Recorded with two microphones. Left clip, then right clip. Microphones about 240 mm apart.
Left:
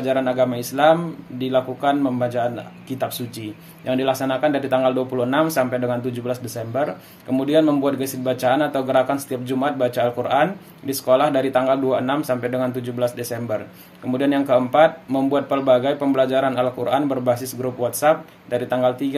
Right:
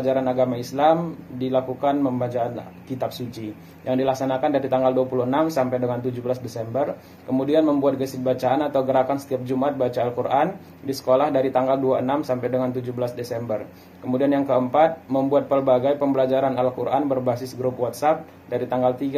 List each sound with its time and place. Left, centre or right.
0.0 s speech: left
3.8 s speech: left